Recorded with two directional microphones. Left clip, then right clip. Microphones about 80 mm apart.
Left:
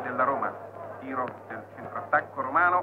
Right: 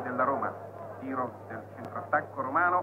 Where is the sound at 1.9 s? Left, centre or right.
Left.